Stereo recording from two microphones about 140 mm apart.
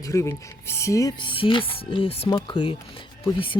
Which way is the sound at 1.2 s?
35° left (ahead or behind).